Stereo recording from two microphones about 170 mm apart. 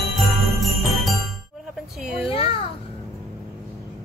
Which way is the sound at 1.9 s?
5° right (ahead or behind).